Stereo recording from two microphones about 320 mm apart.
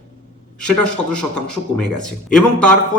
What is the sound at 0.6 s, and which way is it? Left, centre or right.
A man's voice, centre.